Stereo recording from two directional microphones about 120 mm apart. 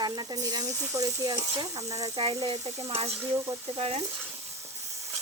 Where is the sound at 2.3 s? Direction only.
45° right (ahead or behind).